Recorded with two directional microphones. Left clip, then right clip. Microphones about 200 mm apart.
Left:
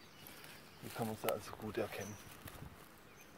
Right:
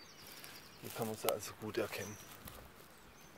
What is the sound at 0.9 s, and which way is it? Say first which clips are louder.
Speech: right 1 dB; 10° right (ahead or behind).